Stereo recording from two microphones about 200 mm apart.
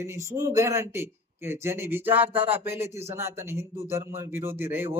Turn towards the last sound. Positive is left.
turn(degrees=-10)  # may be behind; listen again after turning